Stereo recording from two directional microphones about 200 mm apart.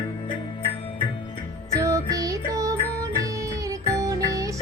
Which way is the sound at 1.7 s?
15° right (ahead or behind).